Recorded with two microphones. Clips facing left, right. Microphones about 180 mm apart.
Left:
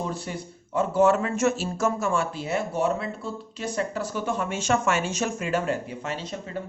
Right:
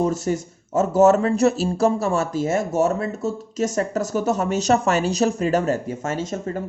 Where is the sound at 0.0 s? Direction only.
45° right (ahead or behind).